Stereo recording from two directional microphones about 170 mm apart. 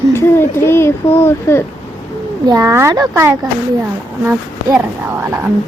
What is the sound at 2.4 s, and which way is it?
Speech, 20° right (ahead or behind).